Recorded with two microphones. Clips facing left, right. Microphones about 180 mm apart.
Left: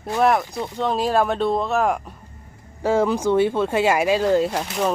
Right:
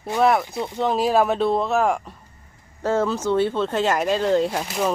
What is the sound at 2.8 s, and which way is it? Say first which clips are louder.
Speech: left 2 dB; 10° left (ahead or behind).